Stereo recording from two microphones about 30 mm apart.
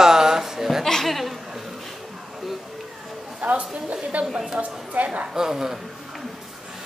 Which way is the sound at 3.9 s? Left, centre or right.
Right.